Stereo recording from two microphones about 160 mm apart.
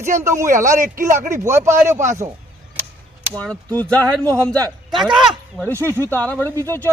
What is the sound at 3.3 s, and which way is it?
Speech, 5° left (ahead or behind).